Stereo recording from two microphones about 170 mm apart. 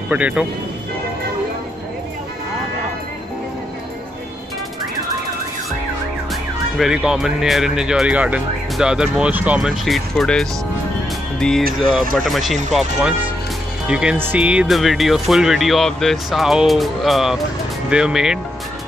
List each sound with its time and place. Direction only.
0.1 s speech: 5° right (ahead or behind)
6.8 s speech: 5° right (ahead or behind)